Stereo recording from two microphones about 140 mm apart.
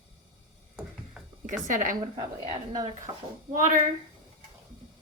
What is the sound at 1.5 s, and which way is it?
Speech, 65° right (ahead or behind).